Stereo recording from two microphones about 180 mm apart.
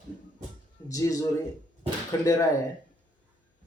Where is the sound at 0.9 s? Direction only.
20° left (ahead or behind).